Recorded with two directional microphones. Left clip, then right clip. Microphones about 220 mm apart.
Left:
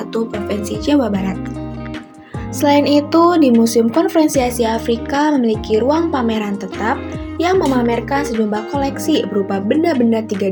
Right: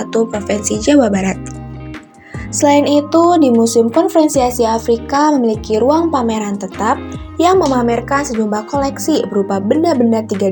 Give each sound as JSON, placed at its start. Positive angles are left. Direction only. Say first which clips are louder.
{"t": 0.1, "sound": "speech", "louder": "right 6 dB", "side_deg": -15}
{"t": 2.6, "sound": "a woman's voice", "louder": "right 2 dB", "side_deg": 5}